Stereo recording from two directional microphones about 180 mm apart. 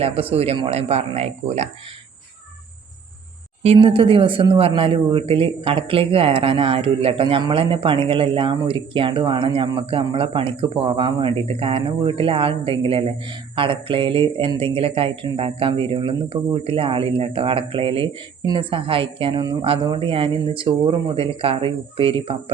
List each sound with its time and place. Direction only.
0.0 s speech: 35° right (ahead or behind)
3.6 s speech: 35° right (ahead or behind)